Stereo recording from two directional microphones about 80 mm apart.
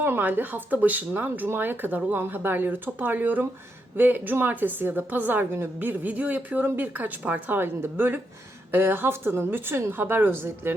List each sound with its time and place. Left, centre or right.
0.0 s a woman's voice: right